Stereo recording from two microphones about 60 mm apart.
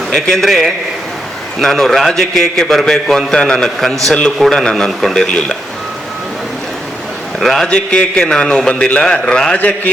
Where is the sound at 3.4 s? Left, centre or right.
Centre.